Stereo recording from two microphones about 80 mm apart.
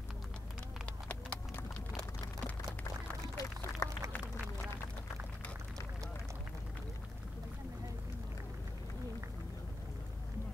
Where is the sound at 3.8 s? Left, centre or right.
Left.